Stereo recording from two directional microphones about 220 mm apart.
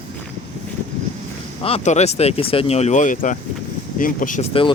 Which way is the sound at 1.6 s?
30° left (ahead or behind).